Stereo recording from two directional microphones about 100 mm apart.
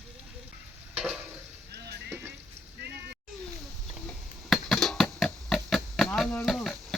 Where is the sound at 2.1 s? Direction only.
25° right (ahead or behind).